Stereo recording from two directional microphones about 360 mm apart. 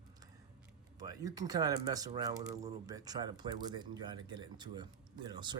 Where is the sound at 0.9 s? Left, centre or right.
Centre.